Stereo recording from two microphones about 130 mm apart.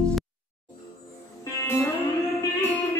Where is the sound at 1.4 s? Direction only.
20° left (ahead or behind).